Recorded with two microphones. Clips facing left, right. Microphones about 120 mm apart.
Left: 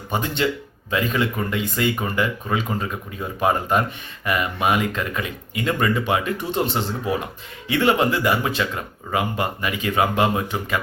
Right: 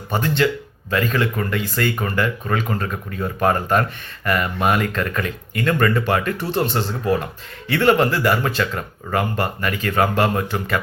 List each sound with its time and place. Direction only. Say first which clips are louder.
0.1 s speech: right 3 dB; 20° left (ahead or behind)